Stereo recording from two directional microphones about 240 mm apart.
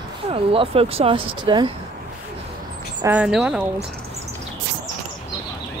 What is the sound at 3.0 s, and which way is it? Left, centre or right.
Speech, centre.